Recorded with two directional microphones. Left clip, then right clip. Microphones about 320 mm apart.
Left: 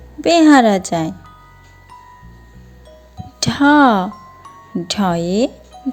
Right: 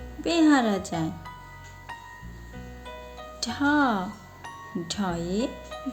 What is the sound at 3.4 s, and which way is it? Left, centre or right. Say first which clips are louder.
Speech: left 12 dB; left.